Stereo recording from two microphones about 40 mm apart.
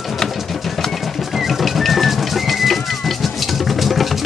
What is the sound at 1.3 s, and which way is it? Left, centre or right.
Music, centre.